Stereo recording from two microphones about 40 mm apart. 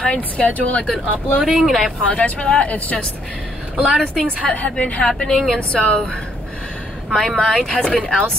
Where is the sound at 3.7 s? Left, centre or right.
Right.